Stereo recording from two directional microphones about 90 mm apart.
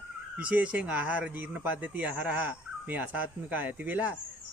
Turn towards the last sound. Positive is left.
turn(degrees=-20)  # may be behind; listen again after turning